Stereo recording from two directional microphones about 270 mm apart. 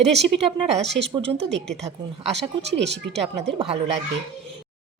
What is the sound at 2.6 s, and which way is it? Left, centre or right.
Speech, right.